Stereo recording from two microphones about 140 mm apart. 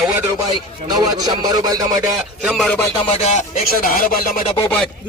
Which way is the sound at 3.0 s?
45° left (ahead or behind).